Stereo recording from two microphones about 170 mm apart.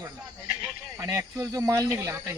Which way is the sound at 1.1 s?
20° right (ahead or behind).